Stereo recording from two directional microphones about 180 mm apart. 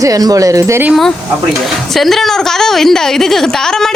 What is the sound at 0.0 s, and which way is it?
Speech, 20° right (ahead or behind).